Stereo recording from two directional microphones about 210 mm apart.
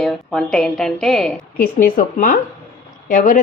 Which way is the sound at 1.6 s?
40° left (ahead or behind).